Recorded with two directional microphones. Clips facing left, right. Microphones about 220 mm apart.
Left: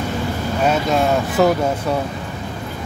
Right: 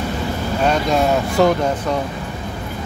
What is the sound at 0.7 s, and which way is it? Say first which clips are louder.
Speech: even; 5° left (ahead or behind).